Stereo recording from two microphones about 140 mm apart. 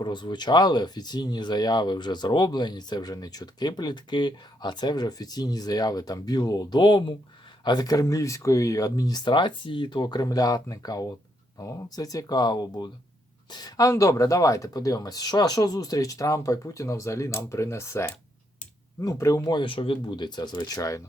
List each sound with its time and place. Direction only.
0.0 s speech: 35° left (ahead or behind)